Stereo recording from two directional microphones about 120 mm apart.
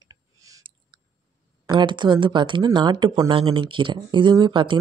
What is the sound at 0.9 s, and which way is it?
Chewing, 40° right (ahead or behind).